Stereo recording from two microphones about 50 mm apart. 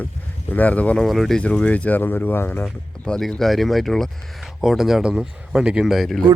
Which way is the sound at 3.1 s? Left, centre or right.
Centre.